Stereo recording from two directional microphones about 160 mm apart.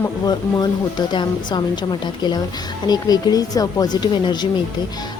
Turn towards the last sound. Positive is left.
turn(degrees=30)  # may be behind; listen again after turning